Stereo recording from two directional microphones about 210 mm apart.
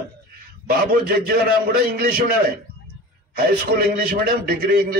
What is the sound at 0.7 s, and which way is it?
A man's voice, 45° right (ahead or behind).